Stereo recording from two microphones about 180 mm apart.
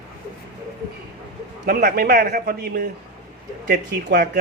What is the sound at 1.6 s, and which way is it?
Speech, 50° right (ahead or behind).